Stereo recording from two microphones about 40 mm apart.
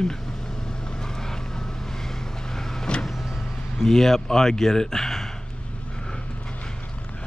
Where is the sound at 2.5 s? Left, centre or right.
Centre.